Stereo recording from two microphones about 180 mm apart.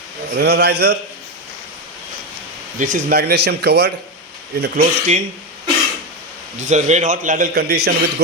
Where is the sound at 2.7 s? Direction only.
45° right (ahead or behind); by 3.9 s 65° right (ahead or behind).